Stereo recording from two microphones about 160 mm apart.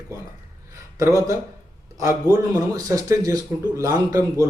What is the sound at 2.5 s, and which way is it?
Speech, 20° right (ahead or behind).